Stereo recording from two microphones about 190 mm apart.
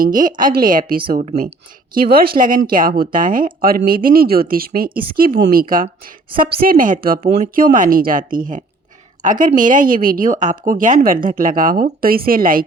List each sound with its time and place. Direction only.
0.0 s speech: 45° right (ahead or behind)